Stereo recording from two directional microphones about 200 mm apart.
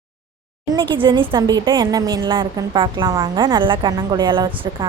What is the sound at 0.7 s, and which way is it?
Speech, 25° right (ahead or behind).